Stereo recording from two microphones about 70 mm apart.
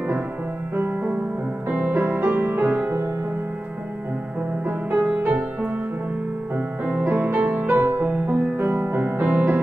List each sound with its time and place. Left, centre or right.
0.7 s music: right
4.6 s music: right